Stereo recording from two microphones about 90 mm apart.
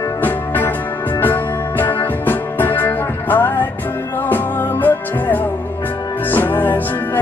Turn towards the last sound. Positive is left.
turn(degrees=20)  # may be behind; listen again after turning